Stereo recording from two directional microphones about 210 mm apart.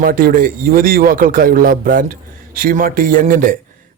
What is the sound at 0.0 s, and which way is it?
A man's voice, 45° right (ahead or behind).